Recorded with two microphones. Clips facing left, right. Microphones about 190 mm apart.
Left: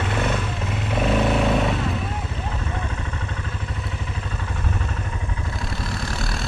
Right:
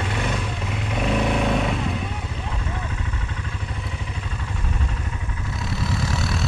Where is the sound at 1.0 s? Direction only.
Centre (ahead or behind).